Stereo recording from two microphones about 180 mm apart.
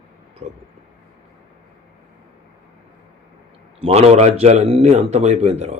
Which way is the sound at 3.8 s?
35° right (ahead or behind).